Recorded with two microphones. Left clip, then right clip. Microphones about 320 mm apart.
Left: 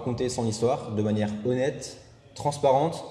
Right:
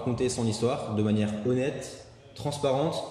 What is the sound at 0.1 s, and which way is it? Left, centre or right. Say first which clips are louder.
A man's voice: left 1 dB; centre.